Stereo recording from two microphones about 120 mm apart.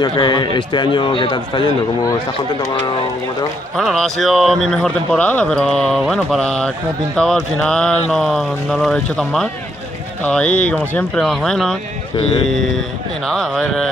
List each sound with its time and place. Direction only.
0.0 s a man's voice: 35° left (ahead or behind)
3.7 s speech: centre (ahead or behind)